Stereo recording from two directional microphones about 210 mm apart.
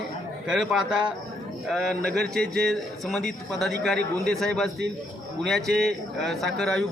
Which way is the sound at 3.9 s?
50° right (ahead or behind).